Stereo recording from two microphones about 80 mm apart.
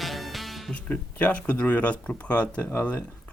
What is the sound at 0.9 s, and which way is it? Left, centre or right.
Speech, centre.